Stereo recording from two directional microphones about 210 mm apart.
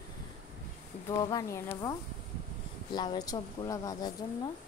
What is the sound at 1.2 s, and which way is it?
Speech, 15° left (ahead or behind).